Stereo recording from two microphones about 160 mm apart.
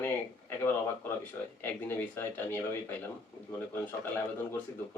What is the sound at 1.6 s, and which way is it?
Speech, 10° left (ahead or behind).